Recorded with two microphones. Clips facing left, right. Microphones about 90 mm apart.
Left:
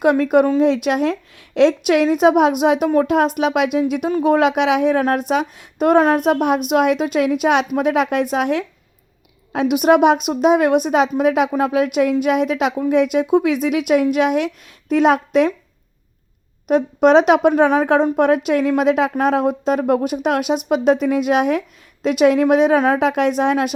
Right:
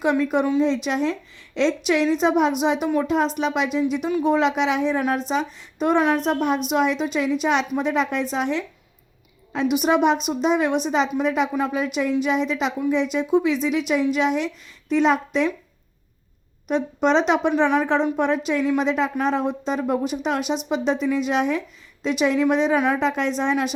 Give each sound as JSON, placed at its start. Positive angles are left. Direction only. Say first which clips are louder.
{"t": 0.0, "sound": "a woman's voice", "louder": "left 6 dB", "side_deg": 55}
{"t": 0.6, "sound": "a woman's voice", "louder": "left 5 dB", "side_deg": 60}
{"t": 16.6, "sound": "a woman's voice", "louder": "left 7 dB", "side_deg": 55}